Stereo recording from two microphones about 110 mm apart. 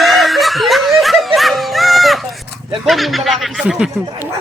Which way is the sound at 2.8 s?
Centre (ahead or behind).